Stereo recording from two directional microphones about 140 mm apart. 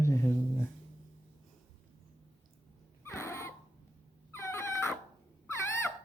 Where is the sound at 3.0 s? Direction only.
20° left (ahead or behind).